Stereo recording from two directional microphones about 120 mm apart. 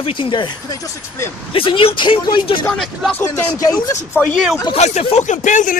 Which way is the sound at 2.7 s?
Centre (ahead or behind).